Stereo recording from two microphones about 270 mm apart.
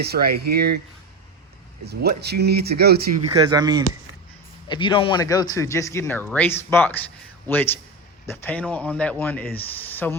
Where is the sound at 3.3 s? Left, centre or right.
Centre.